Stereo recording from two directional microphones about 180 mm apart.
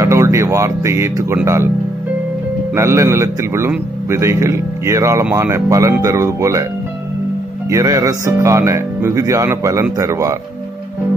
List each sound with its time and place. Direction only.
0.0 s a man's voice: 15° right (ahead or behind)
2.7 s a man's voice: 15° right (ahead or behind)
7.7 s a man's voice: 20° right (ahead or behind)